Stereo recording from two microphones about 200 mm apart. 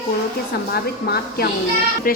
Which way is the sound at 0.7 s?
50° left (ahead or behind).